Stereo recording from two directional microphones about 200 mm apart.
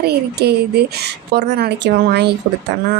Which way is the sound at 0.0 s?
55° right (ahead or behind).